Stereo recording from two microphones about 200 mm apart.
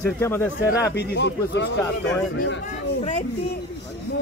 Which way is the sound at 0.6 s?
55° left (ahead or behind).